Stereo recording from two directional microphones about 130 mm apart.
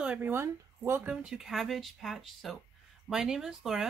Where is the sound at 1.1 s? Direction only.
5° right (ahead or behind).